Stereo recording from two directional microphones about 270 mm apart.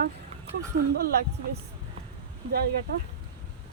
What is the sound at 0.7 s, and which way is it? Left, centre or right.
Speech, right.